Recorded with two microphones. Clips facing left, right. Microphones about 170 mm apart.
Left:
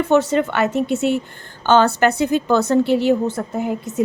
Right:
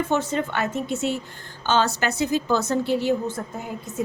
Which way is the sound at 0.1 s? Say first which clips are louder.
Left 8 dB; 75° left (ahead or behind).